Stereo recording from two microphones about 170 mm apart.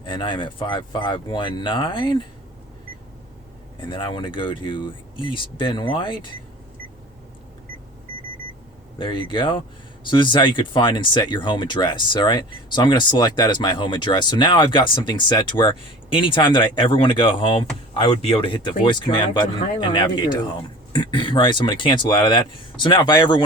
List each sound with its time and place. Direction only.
0.0 s speech: 30° left (ahead or behind)
3.8 s speech: 25° left (ahead or behind)
9.0 s speech: 30° left (ahead or behind)